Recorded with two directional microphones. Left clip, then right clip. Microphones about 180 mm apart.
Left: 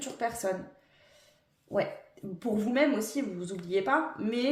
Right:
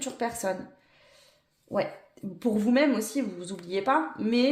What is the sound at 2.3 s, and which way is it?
A woman's voice, 35° right (ahead or behind).